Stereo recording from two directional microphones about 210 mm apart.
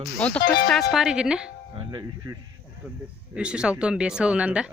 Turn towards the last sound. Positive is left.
turn(degrees=-5)  # may be behind; listen again after turning